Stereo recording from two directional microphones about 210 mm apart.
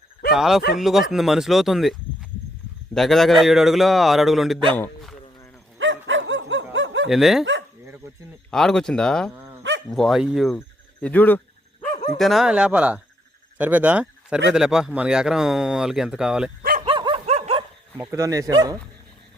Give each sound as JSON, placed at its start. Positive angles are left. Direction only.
{"t": 0.3, "sound": "speech", "side_deg": 0}
{"t": 5.8, "sound": "bow-wow", "side_deg": -65}
{"t": 6.7, "sound": "snicker", "side_deg": -60}
{"t": 7.1, "sound": "speech", "side_deg": 0}
{"t": 8.4, "sound": "speech", "side_deg": 5}
{"t": 9.3, "sound": "dog", "side_deg": -5}
{"t": 9.9, "sound": "speech", "side_deg": 0}
{"t": 16.8, "sound": "dog", "side_deg": -25}
{"t": 17.9, "sound": "speech", "side_deg": -10}